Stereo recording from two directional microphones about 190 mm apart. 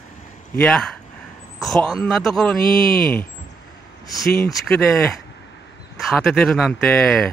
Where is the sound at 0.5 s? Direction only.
5° left (ahead or behind).